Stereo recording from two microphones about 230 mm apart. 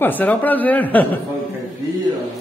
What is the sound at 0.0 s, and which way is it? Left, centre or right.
A man's voice, centre.